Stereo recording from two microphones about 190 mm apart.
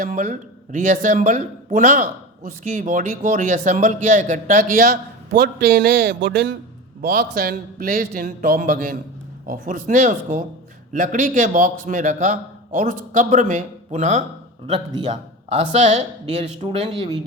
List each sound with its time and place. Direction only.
0.0 s speech: 45° right (ahead or behind); by 6.6 s 65° right (ahead or behind)
7.0 s speech: 50° right (ahead or behind); by 17.2 s 30° right (ahead or behind)